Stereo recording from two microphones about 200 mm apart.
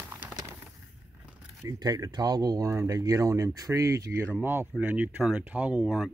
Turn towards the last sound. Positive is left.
turn(degrees=-5)  # may be behind; listen again after turning